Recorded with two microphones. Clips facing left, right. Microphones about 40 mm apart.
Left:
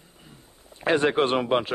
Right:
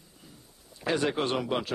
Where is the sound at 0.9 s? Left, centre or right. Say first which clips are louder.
Left 6 dB; left.